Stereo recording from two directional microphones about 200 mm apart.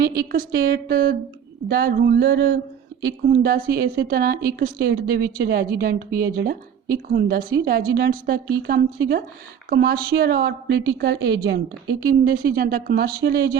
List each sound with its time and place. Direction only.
0.3 s a woman's voice: 50° right (ahead or behind)